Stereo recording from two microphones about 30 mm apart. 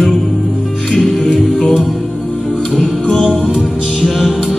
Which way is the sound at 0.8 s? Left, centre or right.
Centre.